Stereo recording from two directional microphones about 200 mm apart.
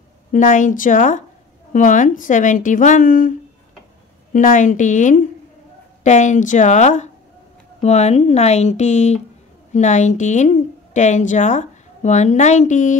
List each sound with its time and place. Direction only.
0.3 s a woman's voice: 40° left (ahead or behind)